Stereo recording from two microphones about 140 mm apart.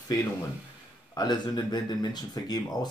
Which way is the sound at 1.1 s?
30° left (ahead or behind).